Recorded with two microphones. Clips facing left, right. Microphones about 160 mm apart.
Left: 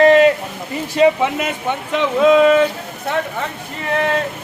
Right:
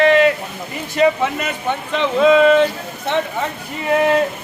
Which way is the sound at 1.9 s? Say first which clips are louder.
Left 1 dB; 10° left (ahead or behind).